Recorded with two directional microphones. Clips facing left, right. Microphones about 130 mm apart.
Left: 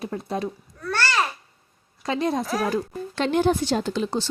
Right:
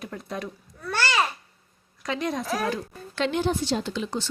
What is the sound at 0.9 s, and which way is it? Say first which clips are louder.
Babbling: left 1 dB; 15° right (ahead or behind).